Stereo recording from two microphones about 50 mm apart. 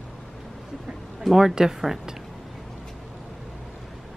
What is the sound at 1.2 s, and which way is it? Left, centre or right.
Speech, centre.